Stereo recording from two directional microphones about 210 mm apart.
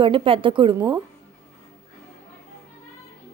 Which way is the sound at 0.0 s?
25° right (ahead or behind).